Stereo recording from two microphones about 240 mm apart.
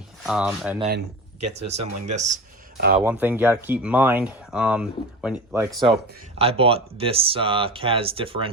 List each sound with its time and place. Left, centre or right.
0.2 s speech: centre
1.4 s speech: right
3.0 s speech: centre
6.4 s speech: right